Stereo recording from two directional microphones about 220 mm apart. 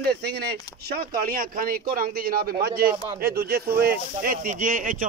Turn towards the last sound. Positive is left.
turn(degrees=-40)  # may be behind; listen again after turning